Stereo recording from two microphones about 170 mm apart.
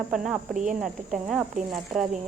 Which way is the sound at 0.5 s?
50° right (ahead or behind).